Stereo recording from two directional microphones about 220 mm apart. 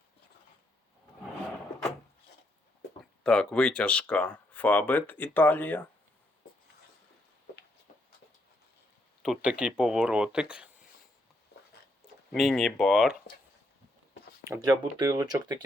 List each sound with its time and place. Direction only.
3.2 s speech: 5° left (ahead or behind)
9.2 s speech: 5° right (ahead or behind)
12.3 s speech: centre (ahead or behind)
14.4 s speech: 10° right (ahead or behind)